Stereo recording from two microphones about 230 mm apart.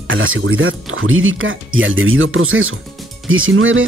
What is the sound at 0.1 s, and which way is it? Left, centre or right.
Speech, right.